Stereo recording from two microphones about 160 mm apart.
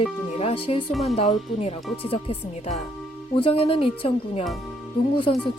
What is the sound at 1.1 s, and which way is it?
Speech, 40° left (ahead or behind).